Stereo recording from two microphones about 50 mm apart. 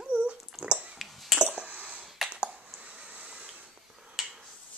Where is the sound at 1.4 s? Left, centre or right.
Centre.